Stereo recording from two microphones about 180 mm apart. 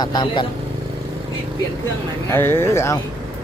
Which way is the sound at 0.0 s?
25° left (ahead or behind).